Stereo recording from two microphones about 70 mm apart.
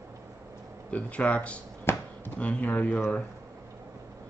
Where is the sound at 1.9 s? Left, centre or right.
Left.